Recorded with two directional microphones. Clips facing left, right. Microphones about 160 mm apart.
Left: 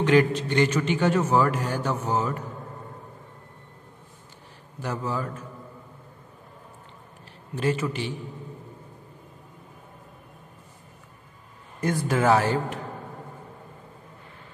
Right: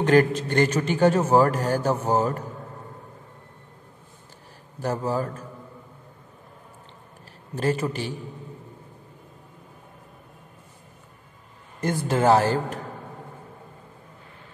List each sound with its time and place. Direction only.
0.0 s a man's voice: 45° right (ahead or behind)
4.8 s a man's voice: 40° right (ahead or behind)
7.5 s a man's voice: 40° right (ahead or behind)
11.8 s a man's voice: 30° right (ahead or behind)